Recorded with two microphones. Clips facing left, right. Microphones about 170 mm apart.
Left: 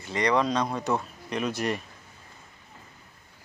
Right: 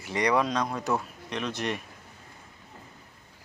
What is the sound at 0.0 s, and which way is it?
Speech, 15° right (ahead or behind).